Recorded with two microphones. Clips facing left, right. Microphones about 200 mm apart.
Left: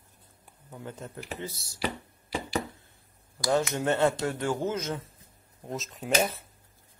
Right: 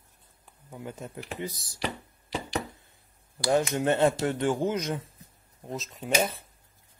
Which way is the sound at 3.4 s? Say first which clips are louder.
Right 2 dB; 15° right (ahead or behind).